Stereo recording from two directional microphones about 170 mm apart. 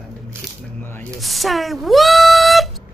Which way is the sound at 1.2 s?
Centre (ahead or behind).